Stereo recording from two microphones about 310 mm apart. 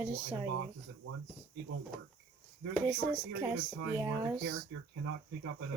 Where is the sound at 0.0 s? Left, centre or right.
Centre.